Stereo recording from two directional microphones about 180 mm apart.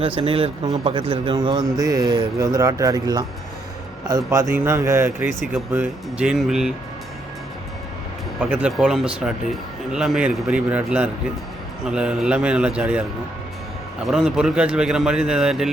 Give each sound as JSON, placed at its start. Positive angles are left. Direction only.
{"t": 0.2, "sound": "a man's voice", "side_deg": -30}
{"t": 8.4, "sound": "a man's voice", "side_deg": -10}
{"t": 14.1, "sound": "a man's voice", "side_deg": -5}